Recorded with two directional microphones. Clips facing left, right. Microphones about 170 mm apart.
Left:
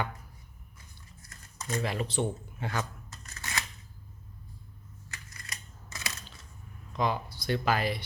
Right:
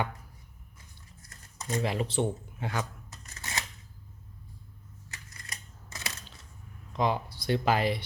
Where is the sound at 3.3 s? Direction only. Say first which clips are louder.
Left 1 dB; 25° right (ahead or behind).